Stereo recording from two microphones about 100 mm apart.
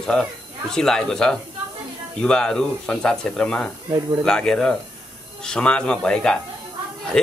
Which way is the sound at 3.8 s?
40° right (ahead or behind).